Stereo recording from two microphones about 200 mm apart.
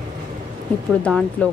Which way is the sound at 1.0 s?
5° left (ahead or behind).